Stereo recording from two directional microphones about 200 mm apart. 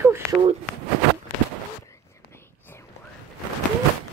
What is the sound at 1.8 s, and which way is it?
Whispering, 15° left (ahead or behind).